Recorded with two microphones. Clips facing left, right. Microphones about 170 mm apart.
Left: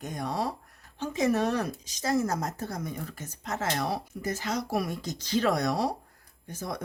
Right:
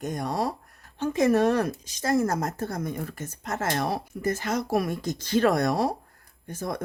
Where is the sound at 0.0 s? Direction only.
45° right (ahead or behind).